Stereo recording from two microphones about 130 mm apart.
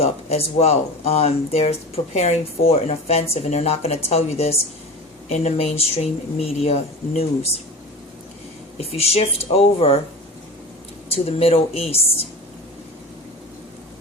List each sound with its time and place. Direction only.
0.0 s speech: 50° left (ahead or behind)
8.8 s speech: 50° left (ahead or behind)
11.1 s speech: 50° left (ahead or behind)